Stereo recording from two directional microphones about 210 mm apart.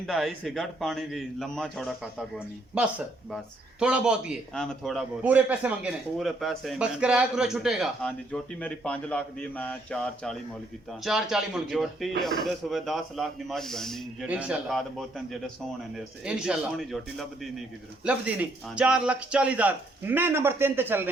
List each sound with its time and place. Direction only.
0.1 s a man's voice: centre (ahead or behind)